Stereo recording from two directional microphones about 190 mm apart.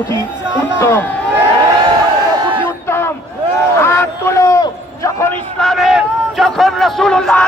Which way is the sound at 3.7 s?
15° left (ahead or behind).